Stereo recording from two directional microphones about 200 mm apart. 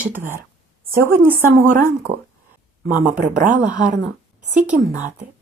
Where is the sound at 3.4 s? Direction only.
35° right (ahead or behind).